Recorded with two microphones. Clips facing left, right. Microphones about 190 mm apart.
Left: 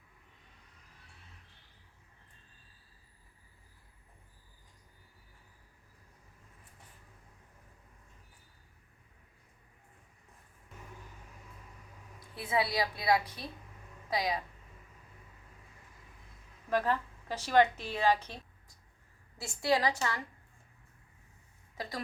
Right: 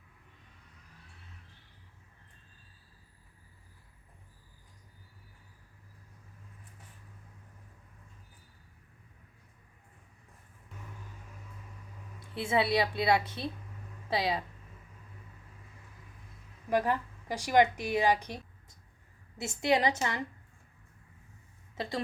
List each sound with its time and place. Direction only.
12.3 s a woman's voice: 25° right (ahead or behind)
16.6 s a woman's voice: 15° right (ahead or behind)
21.8 s a woman's voice: 25° right (ahead or behind)